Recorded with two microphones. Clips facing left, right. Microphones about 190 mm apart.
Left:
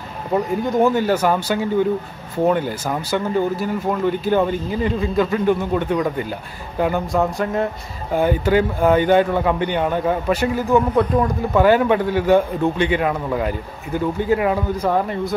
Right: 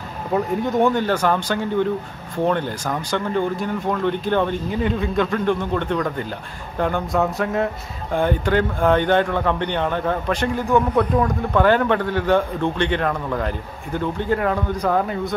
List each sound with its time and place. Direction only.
0.3 s speech: centre (ahead or behind)